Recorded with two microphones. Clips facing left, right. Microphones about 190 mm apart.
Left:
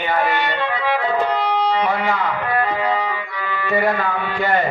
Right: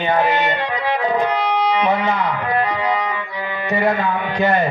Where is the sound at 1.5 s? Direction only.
20° right (ahead or behind).